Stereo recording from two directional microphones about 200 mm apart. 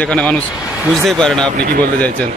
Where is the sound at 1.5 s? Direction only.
55° right (ahead or behind).